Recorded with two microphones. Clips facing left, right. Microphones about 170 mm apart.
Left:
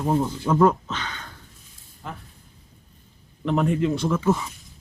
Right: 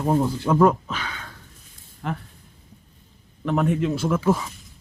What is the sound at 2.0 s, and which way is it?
Speech, 70° right (ahead or behind).